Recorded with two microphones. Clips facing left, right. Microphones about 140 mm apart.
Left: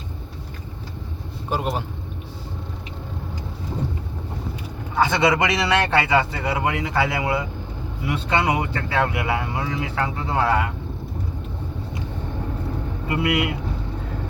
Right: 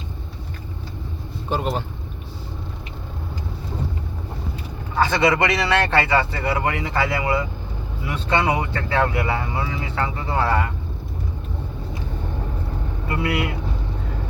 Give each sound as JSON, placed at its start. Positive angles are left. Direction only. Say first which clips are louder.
{"t": 1.5, "sound": "speech", "louder": "right 1 dB", "side_deg": 5}
{"t": 4.9, "sound": "speech", "louder": "even", "side_deg": 15}
{"t": 13.1, "sound": "speech", "louder": "left 2 dB", "side_deg": 20}